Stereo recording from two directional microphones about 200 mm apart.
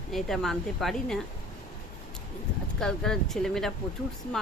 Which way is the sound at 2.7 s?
5° left (ahead or behind).